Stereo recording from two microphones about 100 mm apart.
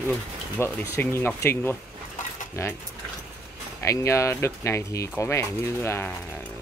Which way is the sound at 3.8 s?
30° left (ahead or behind).